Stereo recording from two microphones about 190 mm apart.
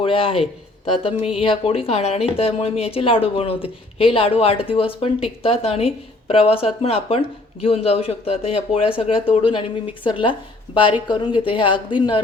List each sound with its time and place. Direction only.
0.0 s speech: 30° left (ahead or behind)